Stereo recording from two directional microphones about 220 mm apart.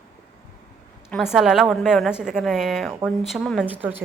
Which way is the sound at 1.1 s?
Centre (ahead or behind).